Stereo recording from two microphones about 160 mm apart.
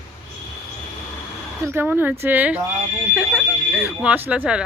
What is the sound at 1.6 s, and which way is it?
Speech, 15° right (ahead or behind).